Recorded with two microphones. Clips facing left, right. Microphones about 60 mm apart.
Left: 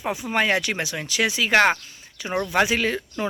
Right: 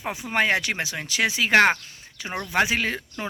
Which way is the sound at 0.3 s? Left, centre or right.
Right.